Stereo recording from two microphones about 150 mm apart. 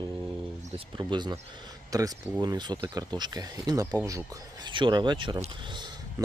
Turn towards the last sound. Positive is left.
turn(degrees=-30)  # may be behind; listen again after turning